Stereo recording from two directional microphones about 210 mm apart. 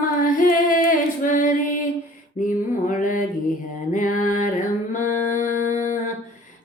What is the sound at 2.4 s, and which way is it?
Mantra, 40° left (ahead or behind).